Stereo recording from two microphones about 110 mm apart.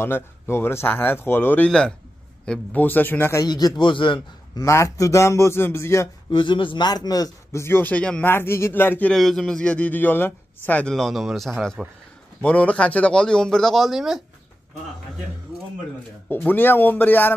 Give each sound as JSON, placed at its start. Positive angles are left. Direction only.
{"t": 0.0, "sound": "speech", "side_deg": 20}
{"t": 1.7, "sound": "a man's voice", "side_deg": 5}
{"t": 3.4, "sound": "a man's voice", "side_deg": 35}
{"t": 4.6, "sound": "speech", "side_deg": 30}
{"t": 6.3, "sound": "a man's voice", "side_deg": 50}
{"t": 8.3, "sound": "speech", "side_deg": 20}
{"t": 9.1, "sound": "a man's voice", "side_deg": 5}
{"t": 16.3, "sound": "a man's voice", "side_deg": 20}